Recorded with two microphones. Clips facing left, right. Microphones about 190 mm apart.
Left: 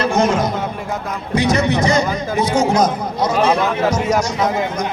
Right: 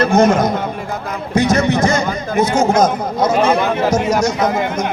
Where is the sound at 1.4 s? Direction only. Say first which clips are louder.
Right 2 dB; 45° right (ahead or behind).